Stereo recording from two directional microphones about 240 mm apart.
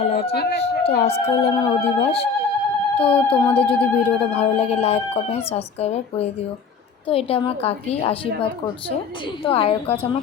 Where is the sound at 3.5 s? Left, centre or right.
Left.